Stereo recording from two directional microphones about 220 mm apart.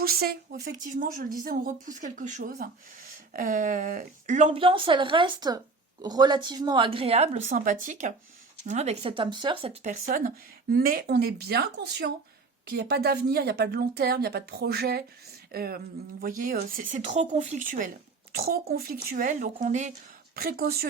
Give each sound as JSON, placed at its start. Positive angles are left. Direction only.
{"t": 0.0, "sound": "a woman's voice", "side_deg": -45}